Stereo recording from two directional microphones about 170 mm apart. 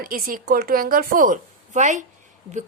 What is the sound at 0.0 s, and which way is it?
A woman's voice, 55° right (ahead or behind).